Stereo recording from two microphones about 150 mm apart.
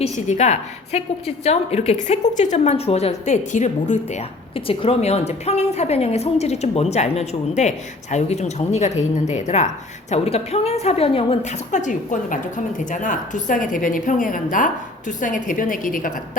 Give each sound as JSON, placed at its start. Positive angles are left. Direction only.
{"t": 0.0, "sound": "a woman's voice", "side_deg": 50}
{"t": 4.5, "sound": "a woman's voice", "side_deg": 35}